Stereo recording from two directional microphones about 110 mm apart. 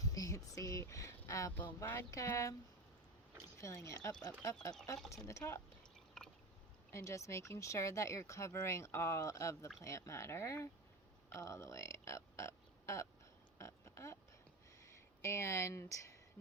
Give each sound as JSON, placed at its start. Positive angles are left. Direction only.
{"t": 0.0, "sound": "speech", "side_deg": 30}
{"t": 1.5, "sound": "speech", "side_deg": 20}
{"t": 3.6, "sound": "speech", "side_deg": 25}
{"t": 5.1, "sound": "speech", "side_deg": 30}
{"t": 6.9, "sound": "speech", "side_deg": 25}
{"t": 13.6, "sound": "oink", "side_deg": 25}
{"t": 14.8, "sound": "speech", "side_deg": 25}